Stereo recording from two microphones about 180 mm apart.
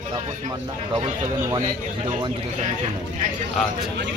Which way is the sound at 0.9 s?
20° right (ahead or behind).